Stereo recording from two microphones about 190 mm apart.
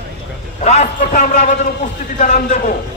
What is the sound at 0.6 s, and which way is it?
A man's voice, 35° left (ahead or behind).